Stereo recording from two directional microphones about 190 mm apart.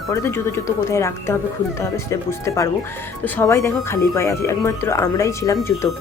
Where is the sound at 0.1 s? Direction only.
15° left (ahead or behind).